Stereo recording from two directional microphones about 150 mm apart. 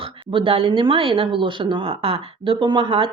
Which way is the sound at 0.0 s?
35° right (ahead or behind).